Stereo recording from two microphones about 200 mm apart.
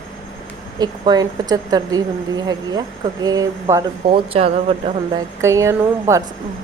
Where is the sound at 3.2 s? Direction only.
20° right (ahead or behind).